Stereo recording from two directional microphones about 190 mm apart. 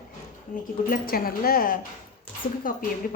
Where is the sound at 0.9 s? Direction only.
50° left (ahead or behind).